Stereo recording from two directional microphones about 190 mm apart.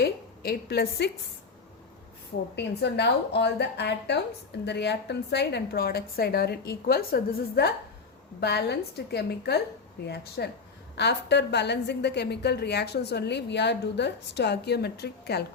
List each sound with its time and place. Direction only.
0.0 s a woman's voice: 55° left (ahead or behind)
2.6 s a woman's voice: 65° left (ahead or behind)